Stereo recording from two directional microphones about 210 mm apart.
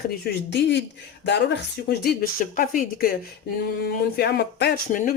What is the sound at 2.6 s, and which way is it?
A woman's voice, 40° left (ahead or behind).